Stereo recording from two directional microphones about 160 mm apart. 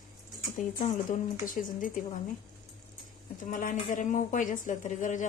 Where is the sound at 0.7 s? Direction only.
55° left (ahead or behind).